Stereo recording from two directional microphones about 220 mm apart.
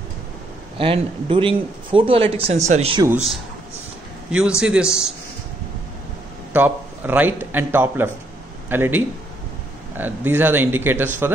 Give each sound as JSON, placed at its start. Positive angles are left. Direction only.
{"t": 0.7, "sound": "a man's voice", "side_deg": -25}
{"t": 4.3, "sound": "a man's voice", "side_deg": -5}
{"t": 6.5, "sound": "a man's voice", "side_deg": -10}